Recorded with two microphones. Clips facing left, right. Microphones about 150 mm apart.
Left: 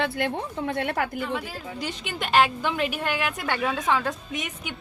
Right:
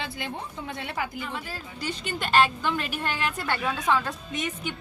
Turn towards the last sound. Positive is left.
turn(degrees=10)  # may be behind; listen again after turning